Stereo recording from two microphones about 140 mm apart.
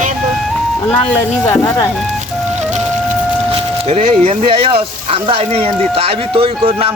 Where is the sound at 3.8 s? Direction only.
45° right (ahead or behind).